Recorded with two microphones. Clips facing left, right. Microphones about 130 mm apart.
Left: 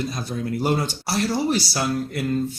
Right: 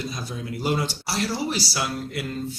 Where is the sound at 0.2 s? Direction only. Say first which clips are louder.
Left 5 dB; 50° left (ahead or behind).